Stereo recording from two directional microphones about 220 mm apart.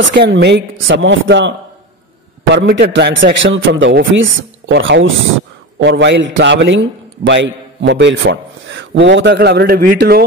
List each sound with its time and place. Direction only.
0.0 s a man's voice: 55° right (ahead or behind)
2.5 s a man's voice: 55° right (ahead or behind)